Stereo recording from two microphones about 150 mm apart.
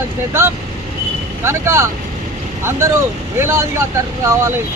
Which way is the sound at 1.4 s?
15° right (ahead or behind).